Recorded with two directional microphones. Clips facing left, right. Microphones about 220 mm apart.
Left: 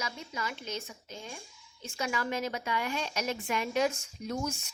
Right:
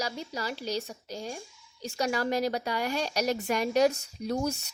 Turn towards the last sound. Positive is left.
turn(degrees=-35)  # may be behind; listen again after turning